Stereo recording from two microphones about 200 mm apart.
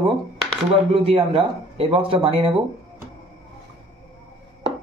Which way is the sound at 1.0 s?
30° right (ahead or behind).